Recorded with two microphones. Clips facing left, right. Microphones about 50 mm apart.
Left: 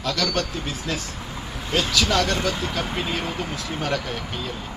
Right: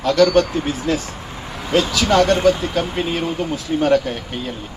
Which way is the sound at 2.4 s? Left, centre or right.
Centre.